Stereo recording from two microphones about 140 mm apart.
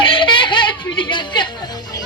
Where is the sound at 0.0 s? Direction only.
35° left (ahead or behind).